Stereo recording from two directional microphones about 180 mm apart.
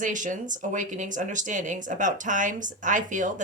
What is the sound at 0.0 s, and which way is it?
Speech, 45° right (ahead or behind).